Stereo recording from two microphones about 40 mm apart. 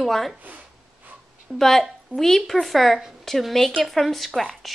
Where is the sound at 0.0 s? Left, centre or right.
Centre.